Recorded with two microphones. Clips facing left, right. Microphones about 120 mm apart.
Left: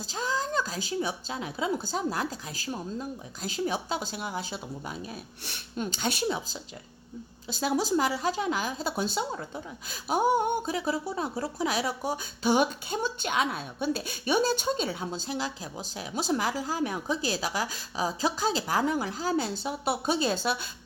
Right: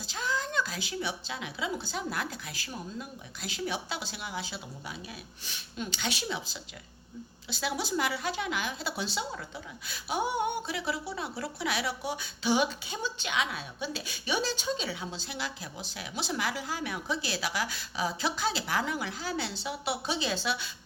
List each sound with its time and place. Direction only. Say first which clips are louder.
0.1 s a woman's voice: left 3 dB; 35° left (ahead or behind)